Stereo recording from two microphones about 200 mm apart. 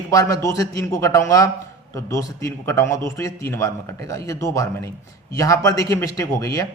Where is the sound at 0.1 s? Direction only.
15° left (ahead or behind).